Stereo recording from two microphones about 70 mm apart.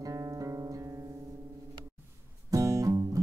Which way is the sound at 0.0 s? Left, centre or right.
Right.